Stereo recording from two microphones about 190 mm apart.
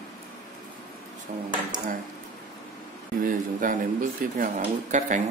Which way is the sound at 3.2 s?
45° right (ahead or behind).